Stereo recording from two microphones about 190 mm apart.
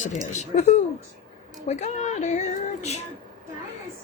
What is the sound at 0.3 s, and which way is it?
Speech, 35° left (ahead or behind).